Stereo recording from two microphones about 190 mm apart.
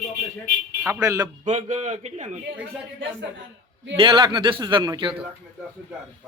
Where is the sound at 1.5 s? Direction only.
40° right (ahead or behind).